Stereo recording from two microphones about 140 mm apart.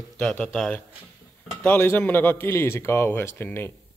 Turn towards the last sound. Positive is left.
turn(degrees=15)  # may be behind; listen again after turning